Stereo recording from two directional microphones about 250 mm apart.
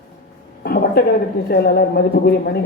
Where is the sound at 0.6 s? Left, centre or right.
Left.